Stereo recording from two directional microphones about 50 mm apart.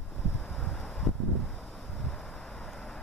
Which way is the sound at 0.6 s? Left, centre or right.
Centre.